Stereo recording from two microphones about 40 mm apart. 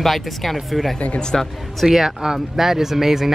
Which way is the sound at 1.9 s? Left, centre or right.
Centre.